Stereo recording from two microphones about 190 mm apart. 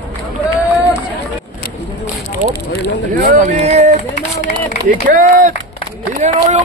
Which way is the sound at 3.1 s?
40° right (ahead or behind).